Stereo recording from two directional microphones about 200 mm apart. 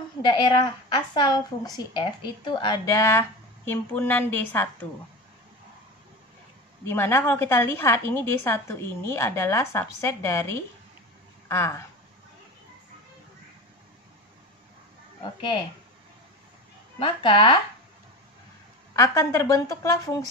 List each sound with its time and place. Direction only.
0.2 s a woman's voice: 20° left (ahead or behind)
6.8 s a woman's voice: 10° left (ahead or behind)
17.0 s a woman's voice: 25° left (ahead or behind)
18.9 s a woman's voice: 15° left (ahead or behind)